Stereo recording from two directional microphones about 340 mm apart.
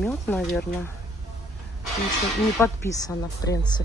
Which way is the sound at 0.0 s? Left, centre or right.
Centre.